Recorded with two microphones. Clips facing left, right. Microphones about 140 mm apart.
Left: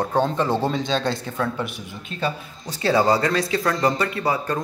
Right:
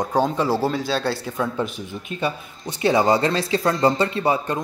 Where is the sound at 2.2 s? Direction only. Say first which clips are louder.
Even; 20° right (ahead or behind).